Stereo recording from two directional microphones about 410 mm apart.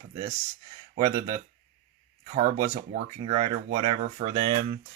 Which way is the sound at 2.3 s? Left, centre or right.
Centre.